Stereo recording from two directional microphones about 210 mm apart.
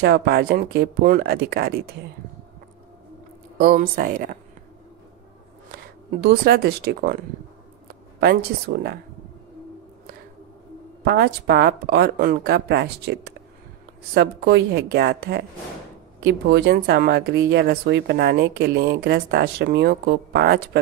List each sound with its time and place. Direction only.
0.0 s speech: 50° right (ahead or behind)
3.5 s speech: 45° right (ahead or behind)
6.2 s speech: 50° right (ahead or behind)
11.1 s speech: 50° right (ahead or behind)